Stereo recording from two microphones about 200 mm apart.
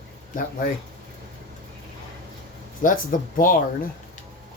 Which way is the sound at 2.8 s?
40° left (ahead or behind).